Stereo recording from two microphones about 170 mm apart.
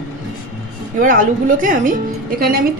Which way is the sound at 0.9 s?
50° right (ahead or behind).